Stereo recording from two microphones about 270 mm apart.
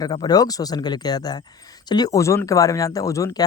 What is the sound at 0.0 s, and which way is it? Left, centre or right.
Speech, centre.